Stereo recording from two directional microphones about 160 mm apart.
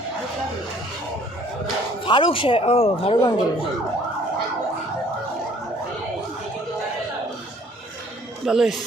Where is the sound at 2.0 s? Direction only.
30° left (ahead or behind).